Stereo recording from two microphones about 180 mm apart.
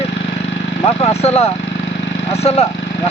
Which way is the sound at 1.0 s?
35° left (ahead or behind).